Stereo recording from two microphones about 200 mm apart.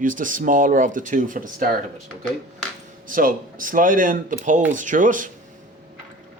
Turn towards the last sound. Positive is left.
turn(degrees=-40)  # may be behind; listen again after turning